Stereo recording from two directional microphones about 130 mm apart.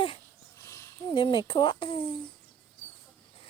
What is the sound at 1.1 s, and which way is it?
Speech, 40° left (ahead or behind).